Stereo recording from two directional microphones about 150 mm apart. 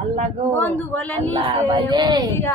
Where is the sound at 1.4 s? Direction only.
35° right (ahead or behind).